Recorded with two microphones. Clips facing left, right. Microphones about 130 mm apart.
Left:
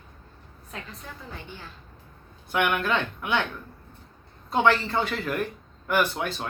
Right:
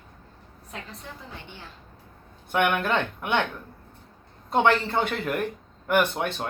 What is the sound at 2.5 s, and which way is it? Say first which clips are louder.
Speech: right 1 dB; 50° right (ahead or behind).